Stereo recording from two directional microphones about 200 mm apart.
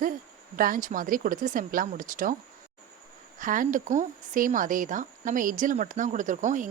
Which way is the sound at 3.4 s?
40° right (ahead or behind).